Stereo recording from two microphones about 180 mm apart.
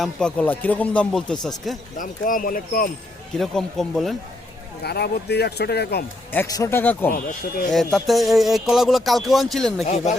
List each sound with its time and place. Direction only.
0.0 s speech: 5° left (ahead or behind)
2.0 s speech: 50° left (ahead or behind)
3.3 s speech: centre (ahead or behind)
4.8 s speech: 60° left (ahead or behind)
6.3 s speech: 15° left (ahead or behind)
7.9 s speech: centre (ahead or behind)
9.8 s speech: 40° left (ahead or behind)